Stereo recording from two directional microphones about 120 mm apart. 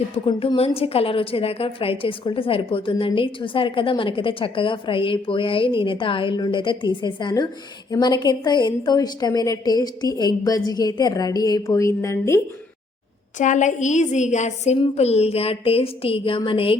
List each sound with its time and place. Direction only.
0.3 s a woman's voice: 50° left (ahead or behind); by 12.4 s 25° left (ahead or behind)
13.4 s a woman's voice: 90° left; by 14.8 s 70° left (ahead or behind)
14.9 s a woman's voice: 60° left (ahead or behind)